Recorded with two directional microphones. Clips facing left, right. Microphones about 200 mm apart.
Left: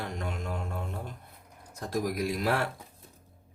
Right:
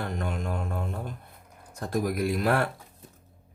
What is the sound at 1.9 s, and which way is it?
Speech, 55° right (ahead or behind).